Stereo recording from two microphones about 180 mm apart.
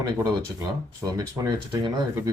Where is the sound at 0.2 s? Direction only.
20° right (ahead or behind).